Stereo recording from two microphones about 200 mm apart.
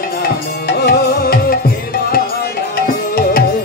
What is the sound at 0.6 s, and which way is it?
Music, 50° left (ahead or behind).